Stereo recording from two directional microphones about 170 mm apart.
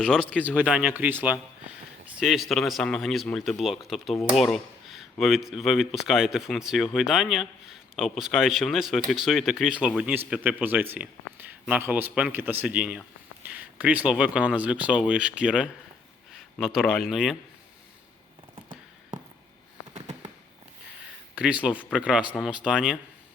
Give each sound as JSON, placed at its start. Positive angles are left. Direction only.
{"t": 0.0, "sound": "speech", "side_deg": 5}
{"t": 0.5, "sound": "speech", "side_deg": -5}
{"t": 19.1, "sound": "a sound", "side_deg": -50}
{"t": 19.9, "sound": "fireworks", "side_deg": -40}
{"t": 21.3, "sound": "speech", "side_deg": -5}